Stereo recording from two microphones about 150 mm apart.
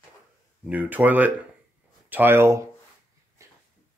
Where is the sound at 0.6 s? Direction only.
10° right (ahead or behind).